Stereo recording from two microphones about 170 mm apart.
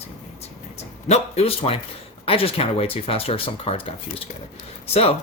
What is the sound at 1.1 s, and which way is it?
Speech, 35° left (ahead or behind).